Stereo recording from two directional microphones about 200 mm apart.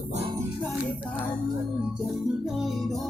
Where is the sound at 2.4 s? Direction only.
Centre (ahead or behind).